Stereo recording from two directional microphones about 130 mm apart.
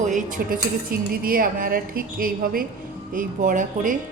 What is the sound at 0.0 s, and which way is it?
A woman's voice, 75° right (ahead or behind).